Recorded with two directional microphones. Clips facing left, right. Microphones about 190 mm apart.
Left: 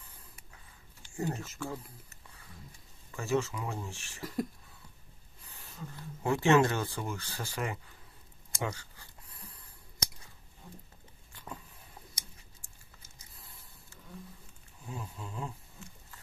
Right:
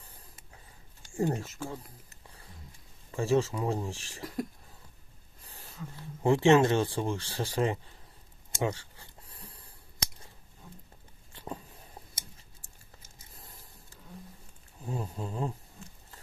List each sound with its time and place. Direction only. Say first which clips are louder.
1.1 s speech: right 6 dB; 30° right (ahead or behind)
3.1 s speech: right 4 dB; 30° right (ahead or behind)
4.2 s speech: left 1 dB; centre (ahead or behind)
5.4 s a sound: right 3 dB; 35° right (ahead or behind)
6.2 s speech: right 4 dB; 25° right (ahead or behind)
8.5 s a sound: right 5 dB; 25° right (ahead or behind)
11.3 s a sound: right 6 dB; 35° right (ahead or behind)
13.4 s printer: right 4 dB; 40° right (ahead or behind)
14.9 s speech: right 7 dB; 35° right (ahead or behind)